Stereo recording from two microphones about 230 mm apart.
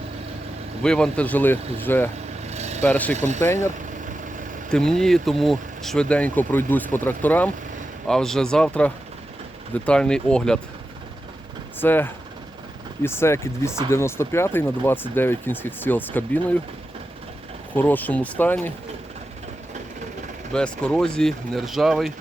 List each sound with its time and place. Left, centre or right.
0.8 s speech: centre
2.5 s a sound: right
2.8 s speech: centre
3.2 s speech: right
3.4 s speech: centre
4.7 s speech: centre
11.8 s speech: centre
17.7 s speech: centre
20.5 s speech: centre